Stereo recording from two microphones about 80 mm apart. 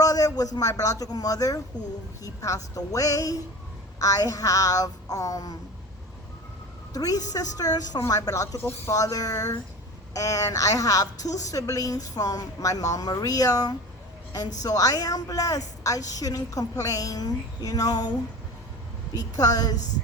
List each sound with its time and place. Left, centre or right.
0.0 s a woman's voice: left
6.9 s a woman's voice: left
19.1 s a woman's voice: left